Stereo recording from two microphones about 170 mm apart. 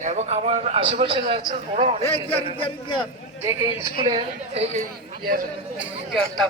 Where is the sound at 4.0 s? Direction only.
35° right (ahead or behind).